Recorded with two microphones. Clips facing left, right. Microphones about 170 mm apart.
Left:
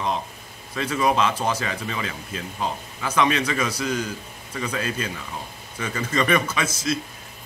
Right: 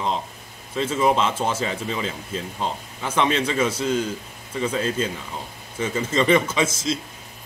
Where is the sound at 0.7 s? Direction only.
25° right (ahead or behind).